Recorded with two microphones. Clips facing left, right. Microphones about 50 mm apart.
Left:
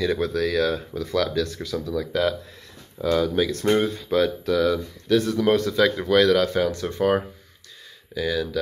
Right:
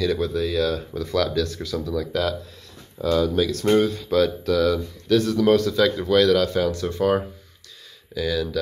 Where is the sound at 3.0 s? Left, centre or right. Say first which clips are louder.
Right 1 dB; left.